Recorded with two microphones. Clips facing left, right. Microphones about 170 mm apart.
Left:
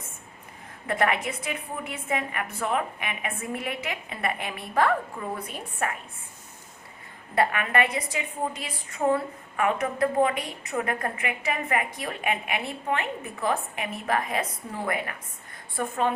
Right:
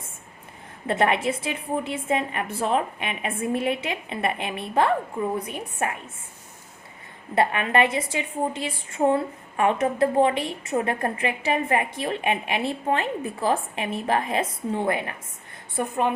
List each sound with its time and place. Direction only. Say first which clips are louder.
0.9 s a woman's voice: right 4 dB; 25° right (ahead or behind)
7.3 s a woman's voice: right 3 dB; 25° right (ahead or behind)
15.7 s a woman's voice: right 2 dB; 15° right (ahead or behind)